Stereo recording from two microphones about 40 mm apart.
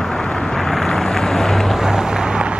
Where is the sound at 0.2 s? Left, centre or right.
Centre.